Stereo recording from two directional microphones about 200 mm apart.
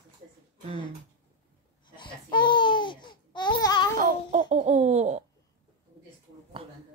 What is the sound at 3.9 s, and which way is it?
Baby laughter, 40° right (ahead or behind).